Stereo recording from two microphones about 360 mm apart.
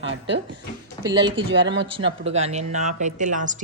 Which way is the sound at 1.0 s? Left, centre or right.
Centre.